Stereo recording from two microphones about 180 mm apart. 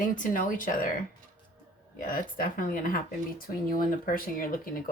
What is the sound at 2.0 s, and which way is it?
Speech, 50° left (ahead or behind).